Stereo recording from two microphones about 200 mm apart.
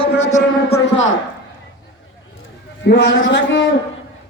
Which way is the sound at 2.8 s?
60° left (ahead or behind).